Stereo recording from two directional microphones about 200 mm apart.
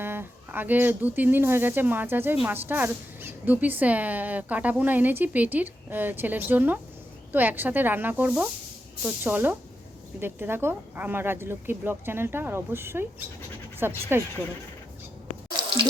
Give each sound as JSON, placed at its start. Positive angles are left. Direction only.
{"t": 0.0, "sound": "speech", "side_deg": -10}